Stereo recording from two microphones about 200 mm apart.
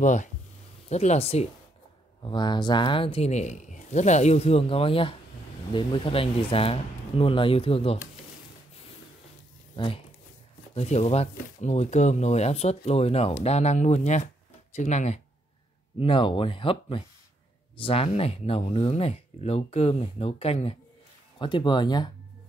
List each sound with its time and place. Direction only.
0.0 s speech: 35° left (ahead or behind)
9.8 s speech: 25° left (ahead or behind)
16.0 s speech: 25° left (ahead or behind)